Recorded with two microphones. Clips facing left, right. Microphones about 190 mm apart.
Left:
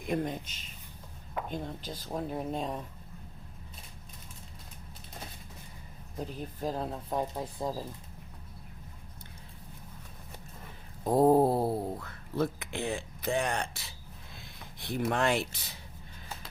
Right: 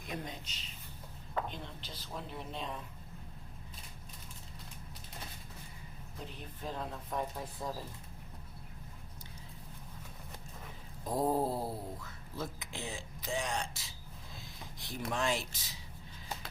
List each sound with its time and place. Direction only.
0.1 s speech: 50° left (ahead or behind)
6.1 s speech: 40° left (ahead or behind)
11.0 s speech: 60° left (ahead or behind)